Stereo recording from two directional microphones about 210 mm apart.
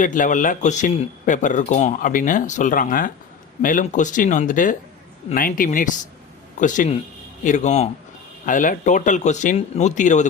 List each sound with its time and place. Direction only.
0.0 s speech: 40° left (ahead or behind)